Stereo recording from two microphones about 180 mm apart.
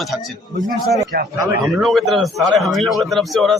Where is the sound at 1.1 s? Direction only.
60° right (ahead or behind).